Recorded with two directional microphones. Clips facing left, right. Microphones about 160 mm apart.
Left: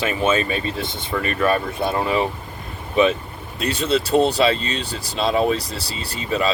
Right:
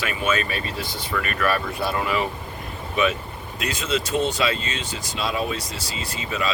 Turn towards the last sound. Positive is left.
turn(degrees=35)  # may be behind; listen again after turning